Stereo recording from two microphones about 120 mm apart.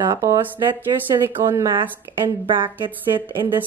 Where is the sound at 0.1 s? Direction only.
30° right (ahead or behind).